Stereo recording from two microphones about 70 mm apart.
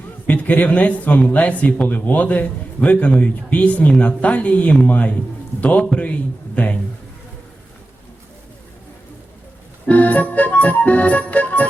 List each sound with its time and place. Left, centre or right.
0.3 s a man's voice: left
9.8 s a man's voice: left